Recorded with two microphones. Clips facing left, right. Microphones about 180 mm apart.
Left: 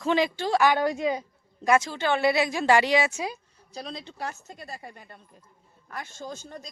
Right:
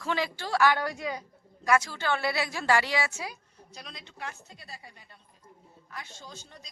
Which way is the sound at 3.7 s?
30° left (ahead or behind).